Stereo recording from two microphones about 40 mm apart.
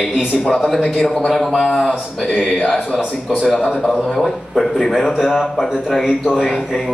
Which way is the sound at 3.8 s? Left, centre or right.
Centre.